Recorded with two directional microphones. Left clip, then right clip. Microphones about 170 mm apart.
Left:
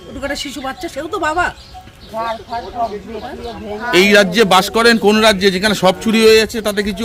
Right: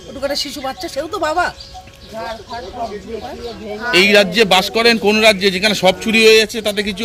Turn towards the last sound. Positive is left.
turn(degrees=45)  # may be behind; listen again after turning